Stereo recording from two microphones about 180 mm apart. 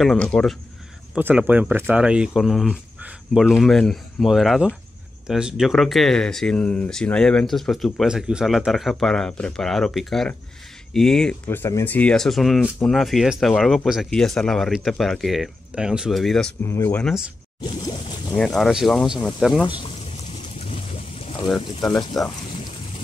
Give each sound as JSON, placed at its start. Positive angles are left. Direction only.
{"t": 0.0, "sound": "speech", "side_deg": 5}
{"t": 1.1, "sound": "speech", "side_deg": -5}
{"t": 16.6, "sound": "speech", "side_deg": 15}
{"t": 17.6, "sound": "a sound", "side_deg": 20}
{"t": 18.3, "sound": "speech", "side_deg": 5}
{"t": 20.6, "sound": "boat", "side_deg": 30}
{"t": 21.5, "sound": "a sound", "side_deg": 25}
{"t": 22.2, "sound": "speech", "side_deg": 0}